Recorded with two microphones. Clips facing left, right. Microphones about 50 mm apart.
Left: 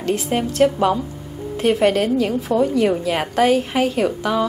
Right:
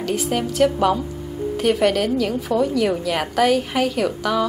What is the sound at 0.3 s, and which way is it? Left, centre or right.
A woman's voice, centre.